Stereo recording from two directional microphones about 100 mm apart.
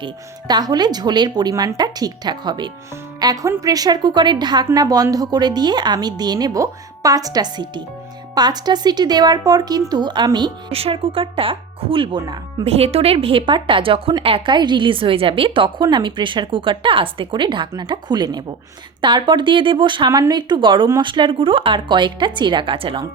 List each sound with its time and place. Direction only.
0.0 s speech: 45° right (ahead or behind)
3.2 s speech: 40° right (ahead or behind)
10.7 s a woman's voice: 75° right (ahead or behind); by 12.2 s 60° right (ahead or behind)
12.2 s speech: 40° right (ahead or behind)
12.6 s a woman's voice: 90° right; by 20.1 s 55° right (ahead or behind)
20.1 s speech: 40° right (ahead or behind); by 23.0 s 60° right (ahead or behind)